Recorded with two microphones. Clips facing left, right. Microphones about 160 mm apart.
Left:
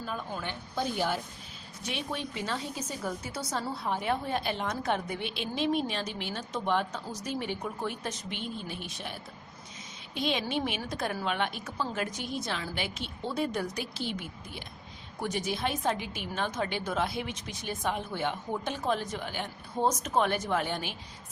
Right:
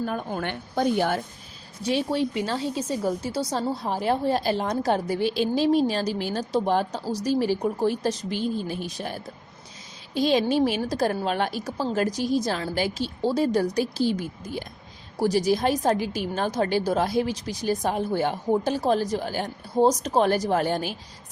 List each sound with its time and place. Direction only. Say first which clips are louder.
0.0 s a woman's voice: right 8 dB; 55° right (ahead or behind)
1.8 s a woman's voice: right 11 dB; 35° right (ahead or behind)